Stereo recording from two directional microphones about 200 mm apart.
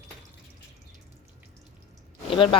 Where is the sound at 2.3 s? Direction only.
25° left (ahead or behind).